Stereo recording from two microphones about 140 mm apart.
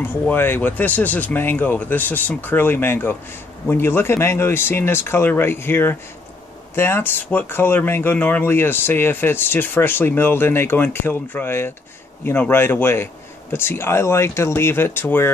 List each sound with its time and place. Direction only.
0.0 s speech: 15° left (ahead or behind)